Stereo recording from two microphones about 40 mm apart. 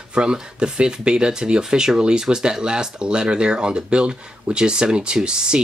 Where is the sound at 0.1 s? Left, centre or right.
Right.